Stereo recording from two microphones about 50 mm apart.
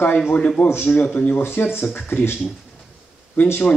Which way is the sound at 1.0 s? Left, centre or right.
Left.